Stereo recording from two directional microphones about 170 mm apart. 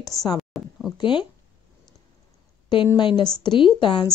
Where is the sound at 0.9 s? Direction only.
30° left (ahead or behind).